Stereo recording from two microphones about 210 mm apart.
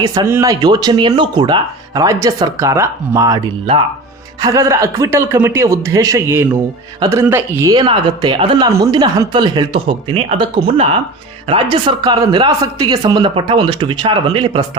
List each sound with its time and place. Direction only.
0.0 s speech: 20° right (ahead or behind)